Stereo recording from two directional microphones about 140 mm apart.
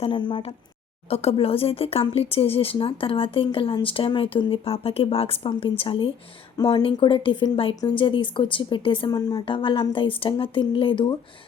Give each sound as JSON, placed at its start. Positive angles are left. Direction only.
{"t": 0.0, "sound": "speech", "side_deg": 35}